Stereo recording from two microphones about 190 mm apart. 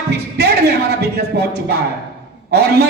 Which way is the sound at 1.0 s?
60° right (ahead or behind).